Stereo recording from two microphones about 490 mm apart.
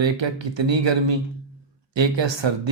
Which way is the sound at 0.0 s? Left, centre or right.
Right.